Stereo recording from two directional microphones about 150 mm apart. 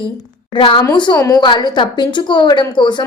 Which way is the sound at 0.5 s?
30° left (ahead or behind).